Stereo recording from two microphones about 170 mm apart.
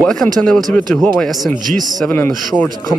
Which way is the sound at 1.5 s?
50° right (ahead or behind).